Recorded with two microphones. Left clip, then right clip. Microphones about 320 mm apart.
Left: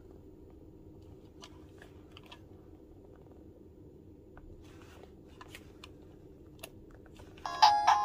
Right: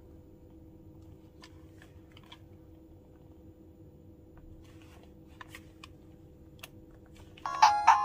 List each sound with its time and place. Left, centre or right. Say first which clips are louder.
7.4 s music: right 2 dB; centre